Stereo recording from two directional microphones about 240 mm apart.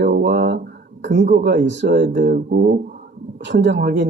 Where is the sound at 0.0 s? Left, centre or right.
Right.